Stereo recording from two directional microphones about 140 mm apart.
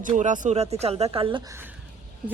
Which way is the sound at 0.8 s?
50° right (ahead or behind).